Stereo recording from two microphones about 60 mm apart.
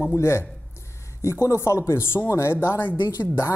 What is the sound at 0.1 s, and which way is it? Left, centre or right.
Speech, left.